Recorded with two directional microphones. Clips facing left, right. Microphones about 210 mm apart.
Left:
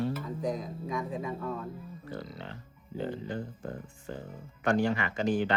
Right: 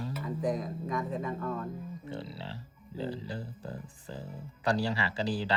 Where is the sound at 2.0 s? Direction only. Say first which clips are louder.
Left 2 dB; 30° right (ahead or behind).